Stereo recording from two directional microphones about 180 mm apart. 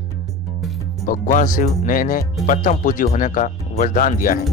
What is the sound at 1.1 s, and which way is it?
Speech, 45° left (ahead or behind).